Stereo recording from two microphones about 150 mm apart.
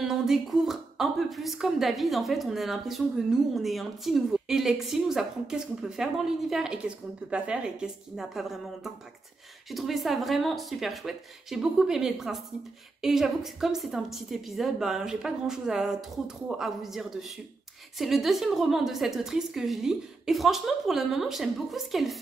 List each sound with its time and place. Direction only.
0.0 s speech: centre (ahead or behind)